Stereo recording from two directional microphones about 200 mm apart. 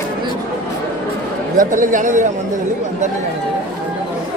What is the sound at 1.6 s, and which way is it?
Speech, 40° right (ahead or behind).